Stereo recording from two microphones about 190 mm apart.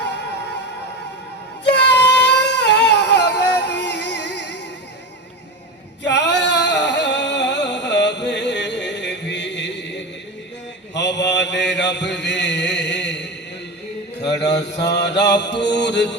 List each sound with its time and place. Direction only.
0.0 s music: 65° left (ahead or behind)
1.6 s singing: 65° left (ahead or behind)
6.0 s a sound: 65° left (ahead or behind)
10.9 s mantra: 65° left (ahead or behind)
14.5 s mantra: 65° left (ahead or behind)